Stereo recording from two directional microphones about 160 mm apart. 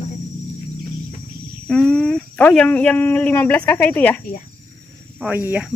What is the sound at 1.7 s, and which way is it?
Speech, 5° left (ahead or behind).